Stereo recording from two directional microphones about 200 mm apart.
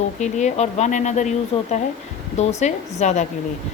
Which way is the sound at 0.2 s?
35° left (ahead or behind).